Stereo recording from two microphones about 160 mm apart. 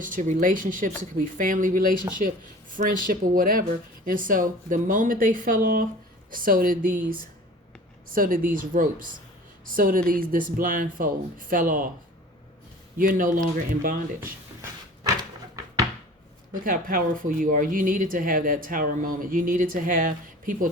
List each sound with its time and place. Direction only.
0.0 s speech: 55° right (ahead or behind)
13.0 s speech: 60° right (ahead or behind)
16.5 s speech: 60° right (ahead or behind)